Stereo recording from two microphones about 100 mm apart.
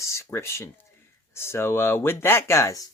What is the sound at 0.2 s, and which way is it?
Speech, 25° left (ahead or behind).